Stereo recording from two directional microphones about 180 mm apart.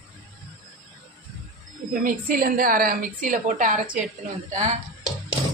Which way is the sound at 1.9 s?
50° right (ahead or behind).